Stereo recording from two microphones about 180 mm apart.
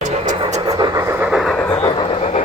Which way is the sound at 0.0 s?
40° right (ahead or behind).